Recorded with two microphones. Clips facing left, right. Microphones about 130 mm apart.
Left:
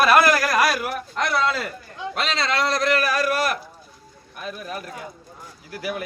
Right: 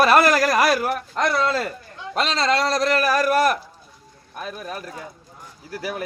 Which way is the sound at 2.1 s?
40° right (ahead or behind).